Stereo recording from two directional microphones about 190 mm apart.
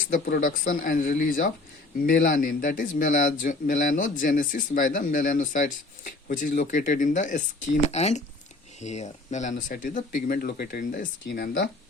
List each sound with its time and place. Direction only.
0.1 s speech: 45° left (ahead or behind); by 11.7 s 65° left (ahead or behind)